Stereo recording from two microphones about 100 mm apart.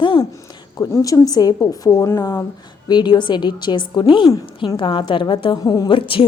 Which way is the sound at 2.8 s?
45° left (ahead or behind).